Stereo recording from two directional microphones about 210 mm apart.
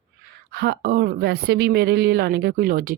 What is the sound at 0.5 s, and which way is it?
Speech, 50° right (ahead or behind).